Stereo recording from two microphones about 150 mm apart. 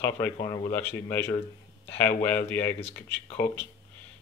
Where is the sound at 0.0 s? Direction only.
20° left (ahead or behind).